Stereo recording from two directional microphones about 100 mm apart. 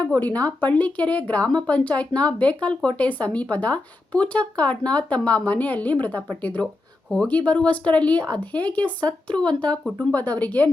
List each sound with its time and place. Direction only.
0.1 s speech: 15° left (ahead or behind)